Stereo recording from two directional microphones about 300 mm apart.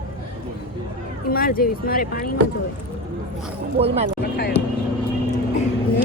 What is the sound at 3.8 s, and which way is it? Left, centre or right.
Speech, centre.